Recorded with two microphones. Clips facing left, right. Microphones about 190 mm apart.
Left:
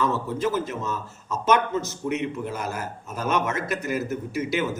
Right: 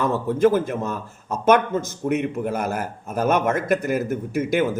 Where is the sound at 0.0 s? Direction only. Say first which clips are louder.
Right 6 dB; 55° right (ahead or behind).